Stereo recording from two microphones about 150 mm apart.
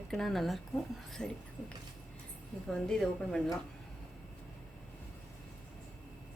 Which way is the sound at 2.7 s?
5° left (ahead or behind).